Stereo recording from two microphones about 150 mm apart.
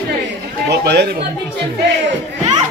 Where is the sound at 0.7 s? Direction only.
90° right.